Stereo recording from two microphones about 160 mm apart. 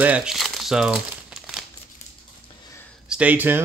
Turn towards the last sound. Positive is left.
turn(degrees=-10)  # may be behind; listen again after turning